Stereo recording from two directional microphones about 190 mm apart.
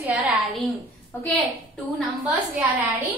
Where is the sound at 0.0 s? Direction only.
10° right (ahead or behind).